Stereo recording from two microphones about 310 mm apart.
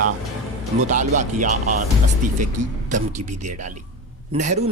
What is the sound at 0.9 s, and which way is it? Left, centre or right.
Speech, right.